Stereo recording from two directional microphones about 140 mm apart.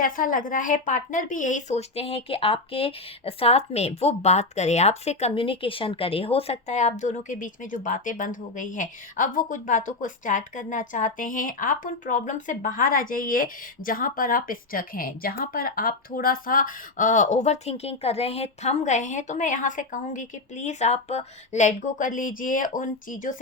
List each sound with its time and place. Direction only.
0.0 s speech: 75° left (ahead or behind)